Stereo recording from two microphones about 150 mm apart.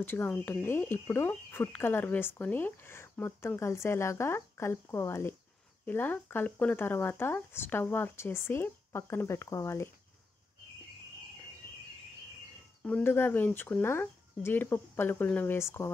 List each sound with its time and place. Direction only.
0.0 s speech: 15° left (ahead or behind)
12.8 s speech: 10° left (ahead or behind)